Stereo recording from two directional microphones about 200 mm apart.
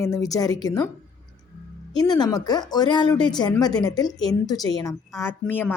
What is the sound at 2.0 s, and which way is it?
A woman's voice, 20° left (ahead or behind).